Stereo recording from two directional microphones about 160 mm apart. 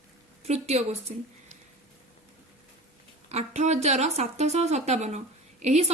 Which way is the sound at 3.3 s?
45° right (ahead or behind).